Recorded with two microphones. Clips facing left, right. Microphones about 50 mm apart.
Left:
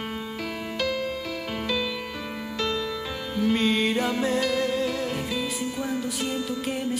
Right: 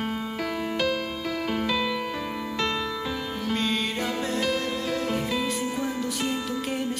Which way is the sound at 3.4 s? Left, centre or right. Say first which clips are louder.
Left 5 dB; centre.